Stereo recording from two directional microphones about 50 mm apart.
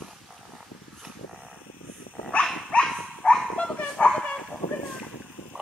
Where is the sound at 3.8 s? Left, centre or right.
Centre.